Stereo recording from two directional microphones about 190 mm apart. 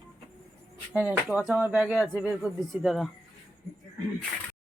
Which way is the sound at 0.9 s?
5° right (ahead or behind).